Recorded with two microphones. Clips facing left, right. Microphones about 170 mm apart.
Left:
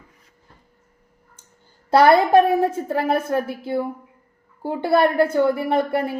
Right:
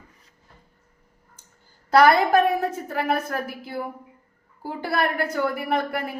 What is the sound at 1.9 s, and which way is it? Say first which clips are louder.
A woman's voice: left 3 dB; 25° left (ahead or behind).